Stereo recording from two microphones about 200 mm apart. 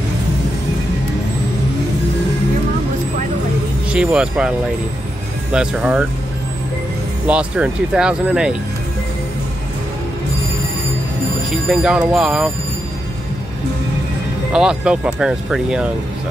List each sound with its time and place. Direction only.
3.9 s speech: 5° right (ahead or behind)
7.2 s speech: 5° right (ahead or behind)
11.5 s speech: 5° right (ahead or behind)
14.5 s speech: 5° right (ahead or behind)